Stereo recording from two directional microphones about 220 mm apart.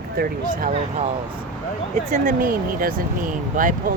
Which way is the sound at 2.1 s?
35° right (ahead or behind).